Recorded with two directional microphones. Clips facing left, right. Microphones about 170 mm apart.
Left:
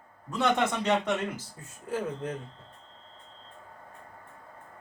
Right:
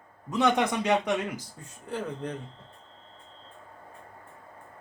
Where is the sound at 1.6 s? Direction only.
5° left (ahead or behind).